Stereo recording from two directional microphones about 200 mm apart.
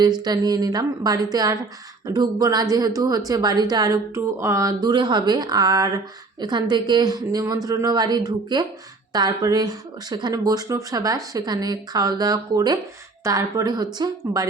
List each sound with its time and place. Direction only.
0.0 s speech: 20° right (ahead or behind)